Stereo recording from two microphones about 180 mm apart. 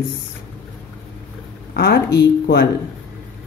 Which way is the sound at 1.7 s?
70° left (ahead or behind).